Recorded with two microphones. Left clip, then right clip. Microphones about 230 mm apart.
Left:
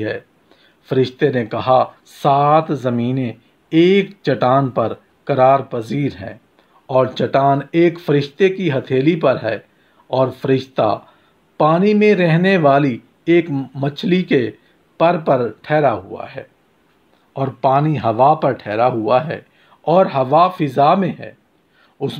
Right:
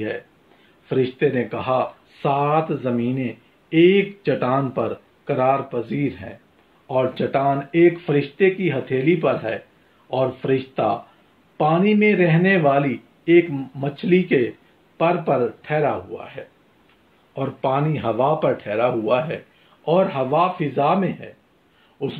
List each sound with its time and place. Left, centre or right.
0.8 s speech: left